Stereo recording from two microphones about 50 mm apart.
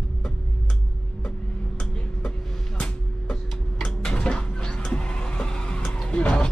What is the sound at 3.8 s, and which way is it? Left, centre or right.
Printer, centre.